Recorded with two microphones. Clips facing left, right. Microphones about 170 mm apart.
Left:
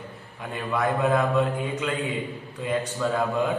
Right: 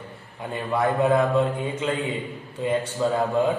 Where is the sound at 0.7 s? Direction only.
25° right (ahead or behind).